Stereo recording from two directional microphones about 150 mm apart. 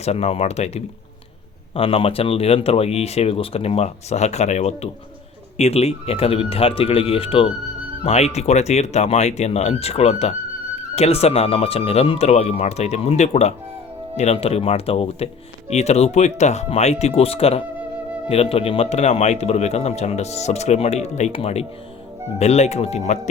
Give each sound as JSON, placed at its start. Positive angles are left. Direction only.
{"t": 0.0, "sound": "speech", "side_deg": 45}